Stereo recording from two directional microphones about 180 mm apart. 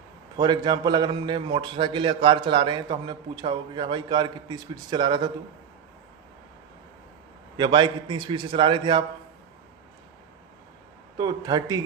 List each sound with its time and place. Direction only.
0.3 s a man's voice: 25° right (ahead or behind)
7.5 s a man's voice: 25° right (ahead or behind)
11.2 s a man's voice: 20° right (ahead or behind)